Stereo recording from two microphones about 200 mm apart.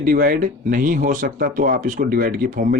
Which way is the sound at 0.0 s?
45° right (ahead or behind).